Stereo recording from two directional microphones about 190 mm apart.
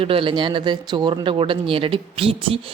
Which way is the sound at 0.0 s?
30° right (ahead or behind).